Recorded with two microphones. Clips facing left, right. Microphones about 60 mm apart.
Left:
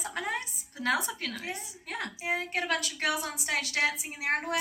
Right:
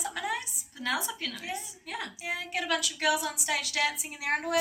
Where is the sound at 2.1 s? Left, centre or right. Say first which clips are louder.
Left 4 dB; left.